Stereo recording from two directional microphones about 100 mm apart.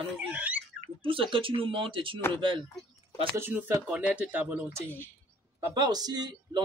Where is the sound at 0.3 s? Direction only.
15° right (ahead or behind).